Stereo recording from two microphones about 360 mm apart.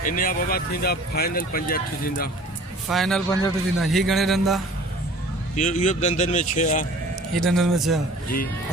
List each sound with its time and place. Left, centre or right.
0.0 s speech: left
2.9 s a man's voice: centre
5.5 s speech: centre
7.3 s a man's voice: centre